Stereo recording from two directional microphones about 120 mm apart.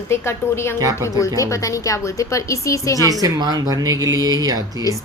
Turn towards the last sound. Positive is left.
turn(degrees=-30)  # may be behind; listen again after turning